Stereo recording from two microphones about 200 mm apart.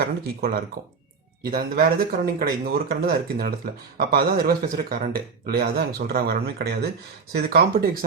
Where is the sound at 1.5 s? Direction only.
50° right (ahead or behind).